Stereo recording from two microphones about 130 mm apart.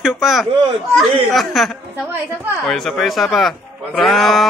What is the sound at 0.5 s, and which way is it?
Speech, 40° right (ahead or behind).